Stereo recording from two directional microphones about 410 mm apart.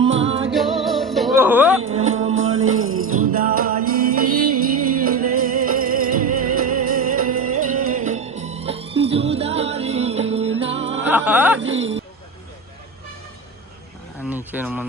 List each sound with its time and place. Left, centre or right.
0.0 s music: right
0.3 s music: centre
0.5 s music: centre
2.3 s music: right
3.4 s music: right
4.3 s music: right
5.0 s music: centre
11.8 s a sound: right
14.3 s a sound: centre